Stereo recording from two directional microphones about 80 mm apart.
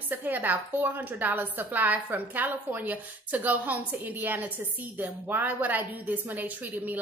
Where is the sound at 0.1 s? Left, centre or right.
Right.